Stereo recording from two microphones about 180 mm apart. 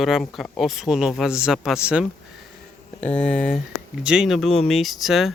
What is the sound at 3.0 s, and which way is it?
Speech, 5° left (ahead or behind).